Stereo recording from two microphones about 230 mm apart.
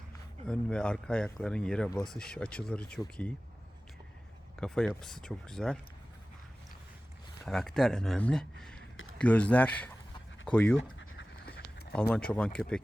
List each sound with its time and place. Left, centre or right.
0.4 s speech: centre
4.5 s speech: centre
7.4 s speech: centre
10.8 s a sound: left
11.9 s speech: centre